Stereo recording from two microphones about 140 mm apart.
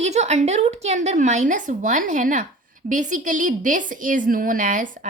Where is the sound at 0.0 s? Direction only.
55° right (ahead or behind).